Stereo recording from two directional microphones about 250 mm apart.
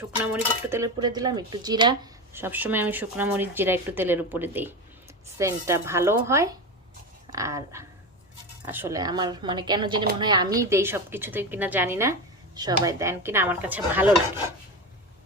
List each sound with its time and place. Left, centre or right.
0.7 s speech: centre